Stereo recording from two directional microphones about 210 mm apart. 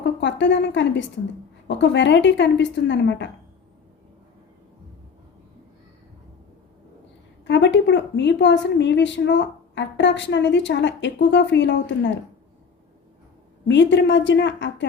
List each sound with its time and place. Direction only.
0.0 s a woman's voice: 55° left (ahead or behind)
7.4 s a woman's voice: 55° left (ahead or behind)
13.7 s a woman's voice: 60° left (ahead or behind)